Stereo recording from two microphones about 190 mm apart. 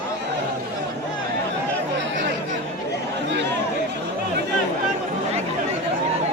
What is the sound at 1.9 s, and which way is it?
Chatter, 75° right (ahead or behind).